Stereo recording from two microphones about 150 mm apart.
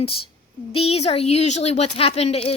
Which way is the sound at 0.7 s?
40° left (ahead or behind).